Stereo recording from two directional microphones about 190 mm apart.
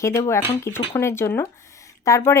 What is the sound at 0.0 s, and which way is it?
Speech, 15° left (ahead or behind).